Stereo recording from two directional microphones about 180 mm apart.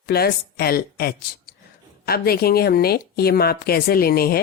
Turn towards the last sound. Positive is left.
turn(degrees=60)  # may be behind; listen again after turning